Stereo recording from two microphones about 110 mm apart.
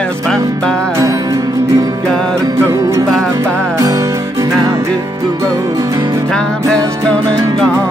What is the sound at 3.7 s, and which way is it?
Music, 30° right (ahead or behind).